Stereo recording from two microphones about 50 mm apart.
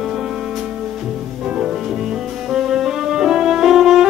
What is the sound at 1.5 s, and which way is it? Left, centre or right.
Music, centre.